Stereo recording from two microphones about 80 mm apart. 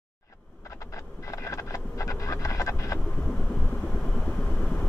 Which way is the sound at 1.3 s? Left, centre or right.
Left.